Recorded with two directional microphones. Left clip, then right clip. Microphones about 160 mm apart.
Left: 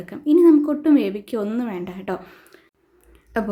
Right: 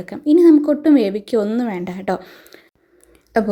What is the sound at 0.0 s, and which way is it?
A woman's voice, 25° right (ahead or behind).